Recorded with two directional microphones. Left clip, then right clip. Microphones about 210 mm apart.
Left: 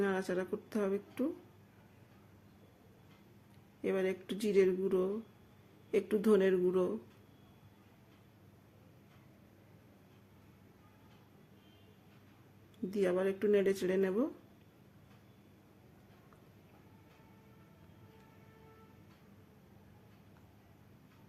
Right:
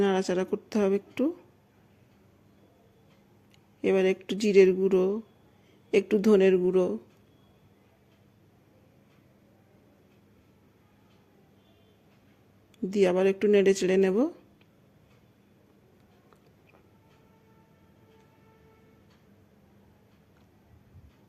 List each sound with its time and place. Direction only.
0.0 s speech: 35° right (ahead or behind)
3.8 s speech: 35° right (ahead or behind)
12.9 s speech: 35° right (ahead or behind)